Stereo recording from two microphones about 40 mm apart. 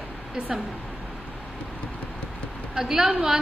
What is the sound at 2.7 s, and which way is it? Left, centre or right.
Speech, centre.